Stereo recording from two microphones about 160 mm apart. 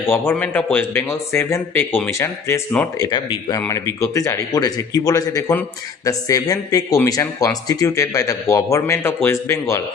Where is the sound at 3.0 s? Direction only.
30° left (ahead or behind).